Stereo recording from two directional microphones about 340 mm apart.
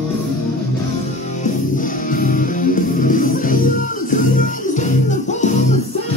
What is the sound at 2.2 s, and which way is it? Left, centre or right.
Music, left.